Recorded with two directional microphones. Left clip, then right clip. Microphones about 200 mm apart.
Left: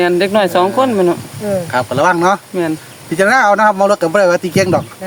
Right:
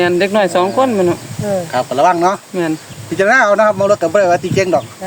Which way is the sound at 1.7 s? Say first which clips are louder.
Right 1 dB; 55° left (ahead or behind).